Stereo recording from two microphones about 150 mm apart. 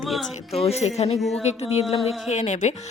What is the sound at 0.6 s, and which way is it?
Speech, 45° left (ahead or behind).